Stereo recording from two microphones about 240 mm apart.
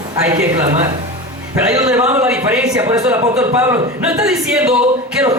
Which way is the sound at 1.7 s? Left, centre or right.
Centre.